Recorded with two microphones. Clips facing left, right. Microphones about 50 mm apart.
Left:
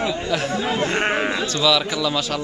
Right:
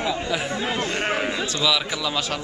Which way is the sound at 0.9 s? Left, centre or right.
Left.